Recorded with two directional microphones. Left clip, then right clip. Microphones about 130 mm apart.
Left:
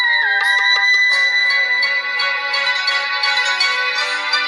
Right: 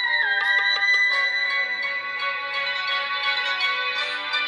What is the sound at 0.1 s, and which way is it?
Music, 30° left (ahead or behind).